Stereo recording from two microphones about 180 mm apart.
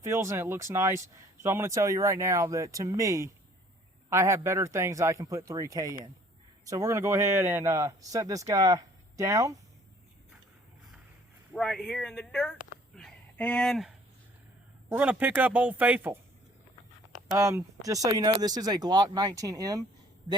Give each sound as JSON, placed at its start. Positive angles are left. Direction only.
{"t": 0.0, "sound": "speech", "side_deg": -15}
{"t": 11.5, "sound": "speech", "side_deg": 0}
{"t": 13.0, "sound": "a sound", "side_deg": 5}
{"t": 14.8, "sound": "speech", "side_deg": -5}
{"t": 17.3, "sound": "speech", "side_deg": -15}